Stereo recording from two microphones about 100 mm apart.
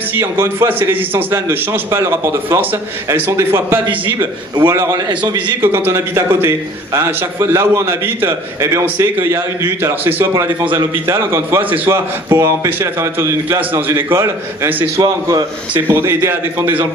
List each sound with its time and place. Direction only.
0.1 s a man's voice: 25° right (ahead or behind)
4.9 s a man's voice: 45° right (ahead or behind)
5.6 s a man's voice: 25° right (ahead or behind)
15.0 s a man's voice: 35° right (ahead or behind)
15.9 s a man's voice: 25° right (ahead or behind)